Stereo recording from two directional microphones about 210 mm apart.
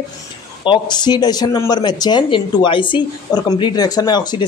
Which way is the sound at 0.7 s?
20° left (ahead or behind).